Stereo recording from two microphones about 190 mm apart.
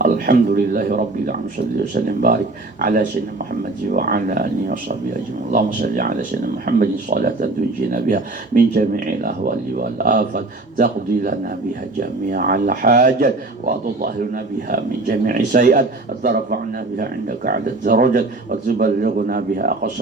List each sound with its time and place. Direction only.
0.0 s speech: 45° right (ahead or behind)